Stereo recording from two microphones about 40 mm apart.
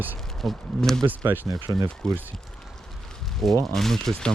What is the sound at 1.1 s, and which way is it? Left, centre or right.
Speech, right.